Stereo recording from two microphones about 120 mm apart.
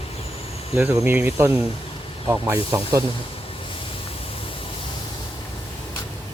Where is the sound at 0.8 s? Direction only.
15° right (ahead or behind).